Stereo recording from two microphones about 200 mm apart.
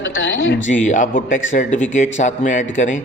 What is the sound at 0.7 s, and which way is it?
A man's voice, 40° left (ahead or behind).